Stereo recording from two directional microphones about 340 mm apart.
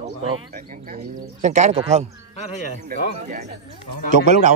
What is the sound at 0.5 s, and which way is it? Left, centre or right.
Speech, right.